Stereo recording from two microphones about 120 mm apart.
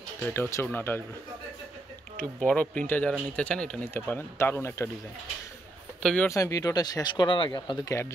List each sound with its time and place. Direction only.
0.2 s speech: 20° left (ahead or behind)
2.1 s speech: 10° left (ahead or behind)
3.9 s speech: 15° left (ahead or behind)
6.2 s speech: 25° left (ahead or behind)